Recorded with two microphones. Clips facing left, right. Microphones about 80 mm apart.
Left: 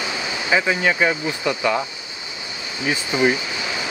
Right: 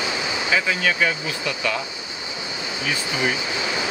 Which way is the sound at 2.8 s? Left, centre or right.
Left.